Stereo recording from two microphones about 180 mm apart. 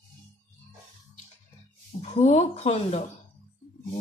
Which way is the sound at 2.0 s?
40° left (ahead or behind).